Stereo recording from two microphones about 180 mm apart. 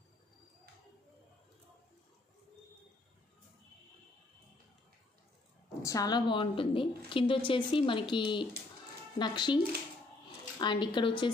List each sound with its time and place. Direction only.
5.8 s speech: 20° left (ahead or behind)
10.6 s speech: 25° left (ahead or behind)